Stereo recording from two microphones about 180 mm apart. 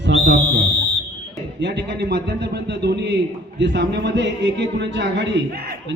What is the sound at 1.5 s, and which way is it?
A man's voice, 70° right (ahead or behind).